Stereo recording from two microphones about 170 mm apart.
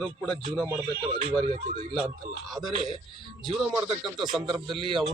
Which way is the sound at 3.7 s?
25° right (ahead or behind).